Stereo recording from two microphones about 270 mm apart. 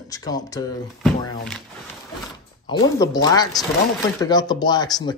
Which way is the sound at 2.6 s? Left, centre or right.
Centre.